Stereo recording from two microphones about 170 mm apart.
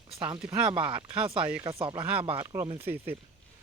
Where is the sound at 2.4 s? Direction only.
20° right (ahead or behind).